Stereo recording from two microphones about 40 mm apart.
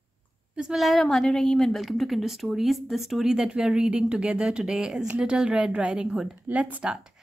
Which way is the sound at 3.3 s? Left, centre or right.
Centre.